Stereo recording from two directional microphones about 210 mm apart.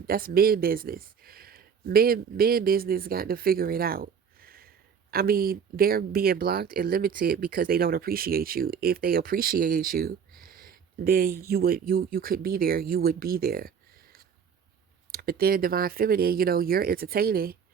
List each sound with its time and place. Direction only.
0.1 s speech: 45° right (ahead or behind)